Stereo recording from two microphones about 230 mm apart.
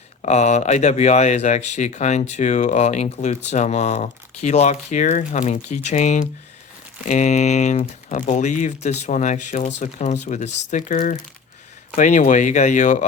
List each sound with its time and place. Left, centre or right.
0.2 s speech: left